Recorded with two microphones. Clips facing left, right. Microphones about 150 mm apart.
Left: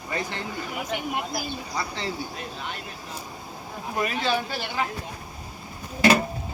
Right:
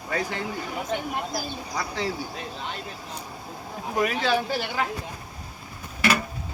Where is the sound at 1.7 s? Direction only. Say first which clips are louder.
Right 3 dB; 10° right (ahead or behind).